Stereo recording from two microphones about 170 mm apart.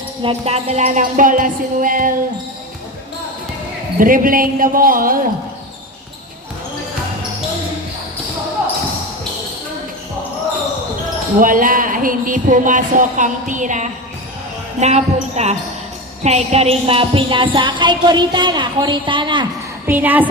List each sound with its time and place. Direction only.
0.2 s speech: 35° right (ahead or behind)
0.9 s speech: 50° right (ahead or behind)
3.9 s speech: 55° right (ahead or behind)
11.3 s speech: 55° right (ahead or behind)
16.2 s music: 40° right (ahead or behind)
19.9 s a woman's voice: 10° right (ahead or behind)